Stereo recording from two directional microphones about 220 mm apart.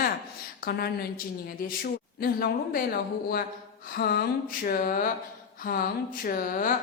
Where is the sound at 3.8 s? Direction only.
45° left (ahead or behind).